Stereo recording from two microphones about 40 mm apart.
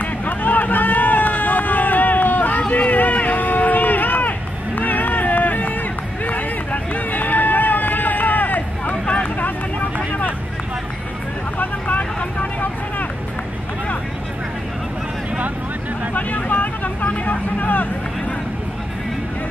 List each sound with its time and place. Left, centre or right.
0.0 s a sound: left
2.7 s run: left
9.9 s vehicle: left
11.5 s vehicle: left
16.2 s vehicle: left